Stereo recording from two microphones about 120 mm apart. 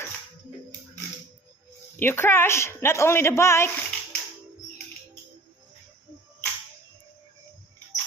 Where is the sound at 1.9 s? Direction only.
20° left (ahead or behind).